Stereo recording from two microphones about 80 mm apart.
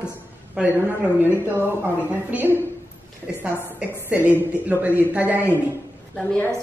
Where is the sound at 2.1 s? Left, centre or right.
Right.